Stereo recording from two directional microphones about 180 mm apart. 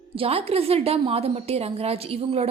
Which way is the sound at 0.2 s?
35° right (ahead or behind).